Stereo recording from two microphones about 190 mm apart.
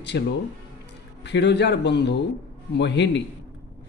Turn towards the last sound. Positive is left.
turn(degrees=65)  # may be behind; listen again after turning